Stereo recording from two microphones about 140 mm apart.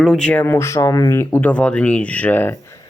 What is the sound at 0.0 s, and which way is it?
Speech, 5° left (ahead or behind).